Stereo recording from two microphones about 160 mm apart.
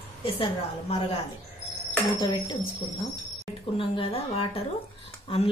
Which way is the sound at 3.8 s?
35° left (ahead or behind).